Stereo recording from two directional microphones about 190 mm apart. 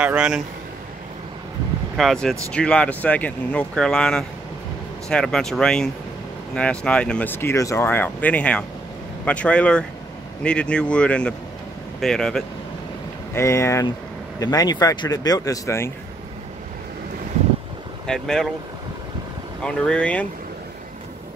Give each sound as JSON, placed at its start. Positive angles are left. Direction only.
{"t": 0.0, "sound": "speech", "side_deg": -5}
{"t": 2.0, "sound": "speech", "side_deg": 0}
{"t": 13.3, "sound": "speech", "side_deg": 15}
{"t": 18.0, "sound": "speech", "side_deg": 5}
{"t": 19.6, "sound": "speech", "side_deg": 5}